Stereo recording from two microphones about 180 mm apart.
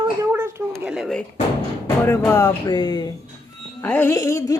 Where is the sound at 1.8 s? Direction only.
15° left (ahead or behind).